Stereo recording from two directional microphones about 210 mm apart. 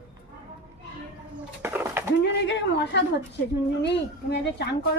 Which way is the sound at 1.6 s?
10° right (ahead or behind).